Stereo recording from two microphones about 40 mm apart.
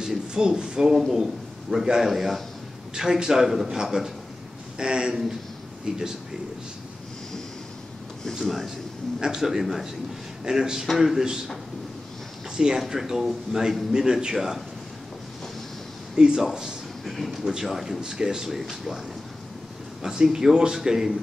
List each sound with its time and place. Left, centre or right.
0.0 s a man's voice: centre
2.9 s a man's voice: centre
8.5 s speech: centre
9.2 s a man's voice: centre
12.5 s a man's voice: centre
16.2 s a man's voice: centre
17.0 s speech: centre
17.4 s a man's voice: centre
18.0 s a man's voice: centre
18.5 s speech: centre
20.0 s a man's voice: centre